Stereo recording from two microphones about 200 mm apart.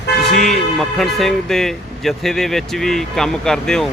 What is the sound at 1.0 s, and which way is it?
Speech, centre (ahead or behind).